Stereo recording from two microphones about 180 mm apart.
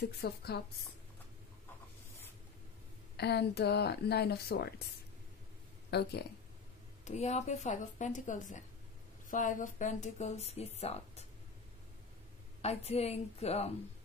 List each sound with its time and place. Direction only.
0.0 s a woman's voice: 65° left (ahead or behind)
3.2 s a woman's voice: 65° left (ahead or behind)
5.9 s speech: 65° left (ahead or behind)
7.1 s speech: 40° left (ahead or behind)
12.6 s speech: 35° left (ahead or behind)